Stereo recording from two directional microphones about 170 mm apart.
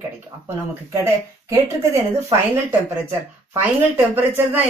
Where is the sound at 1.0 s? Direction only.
15° right (ahead or behind).